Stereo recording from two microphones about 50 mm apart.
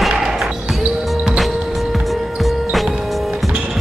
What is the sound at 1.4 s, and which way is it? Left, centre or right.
Music, centre.